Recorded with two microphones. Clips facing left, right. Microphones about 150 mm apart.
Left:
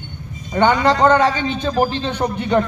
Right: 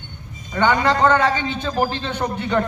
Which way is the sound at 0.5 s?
20° left (ahead or behind).